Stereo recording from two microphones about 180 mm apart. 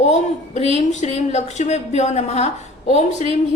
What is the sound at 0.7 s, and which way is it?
A woman's voice, 40° left (ahead or behind).